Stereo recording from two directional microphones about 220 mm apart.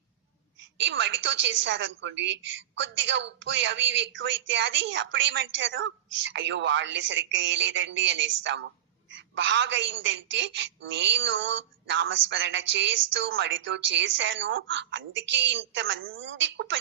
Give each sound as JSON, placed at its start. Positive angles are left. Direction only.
{"t": 0.8, "sound": "a woman's voice", "side_deg": -55}